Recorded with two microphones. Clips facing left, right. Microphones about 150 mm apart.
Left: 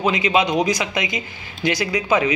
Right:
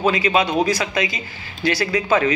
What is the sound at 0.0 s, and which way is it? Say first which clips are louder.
Speech: even; 20° left (ahead or behind).